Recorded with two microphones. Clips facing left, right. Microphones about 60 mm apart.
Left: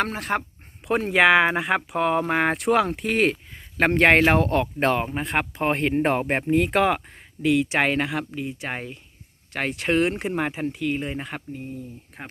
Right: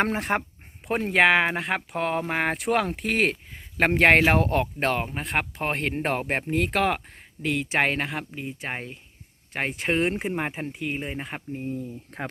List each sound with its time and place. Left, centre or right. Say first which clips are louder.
0.0 s speech: right 1 dB; right
0.9 s speech: left 2 dB; centre
4.8 s speech: left 4 dB; centre